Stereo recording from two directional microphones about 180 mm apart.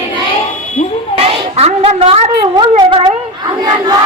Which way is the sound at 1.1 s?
35° right (ahead or behind).